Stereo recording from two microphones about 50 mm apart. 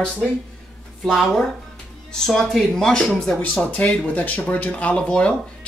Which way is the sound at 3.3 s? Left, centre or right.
Left.